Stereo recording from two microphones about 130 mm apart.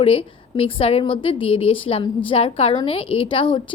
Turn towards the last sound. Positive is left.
turn(degrees=40)  # may be behind; listen again after turning